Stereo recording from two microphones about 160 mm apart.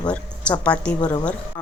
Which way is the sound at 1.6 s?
25° left (ahead or behind).